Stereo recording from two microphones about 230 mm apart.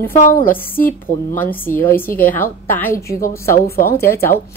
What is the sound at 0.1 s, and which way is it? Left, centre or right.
Speech, left.